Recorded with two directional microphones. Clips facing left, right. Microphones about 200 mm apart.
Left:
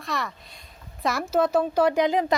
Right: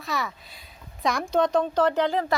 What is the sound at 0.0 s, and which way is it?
Speech, centre (ahead or behind).